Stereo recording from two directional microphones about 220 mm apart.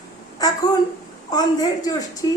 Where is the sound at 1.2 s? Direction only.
15° left (ahead or behind).